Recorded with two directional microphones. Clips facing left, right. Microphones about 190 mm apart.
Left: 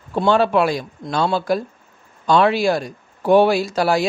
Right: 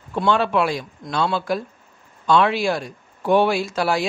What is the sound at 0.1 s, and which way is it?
Speech, 35° left (ahead or behind).